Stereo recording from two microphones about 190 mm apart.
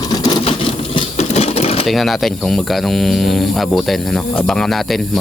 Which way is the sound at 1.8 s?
Centre (ahead or behind).